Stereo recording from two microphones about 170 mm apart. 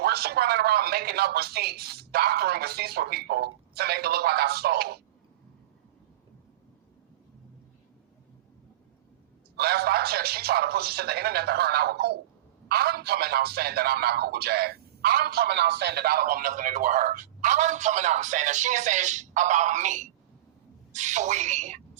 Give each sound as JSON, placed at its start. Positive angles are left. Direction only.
{"t": 0.0, "sound": "speech", "side_deg": -65}
{"t": 9.6, "sound": "a man's voice", "side_deg": -65}